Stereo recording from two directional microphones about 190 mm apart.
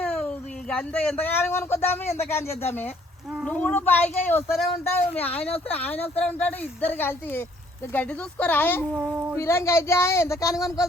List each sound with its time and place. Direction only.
0.0 s speech: 5° left (ahead or behind)
9.0 s speech: 5° right (ahead or behind)
9.4 s speech: 15° left (ahead or behind)